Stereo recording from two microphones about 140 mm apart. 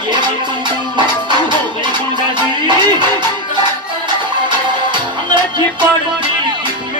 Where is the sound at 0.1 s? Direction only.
35° right (ahead or behind).